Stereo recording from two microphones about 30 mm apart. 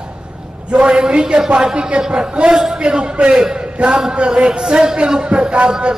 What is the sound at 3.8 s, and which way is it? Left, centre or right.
Speech, right.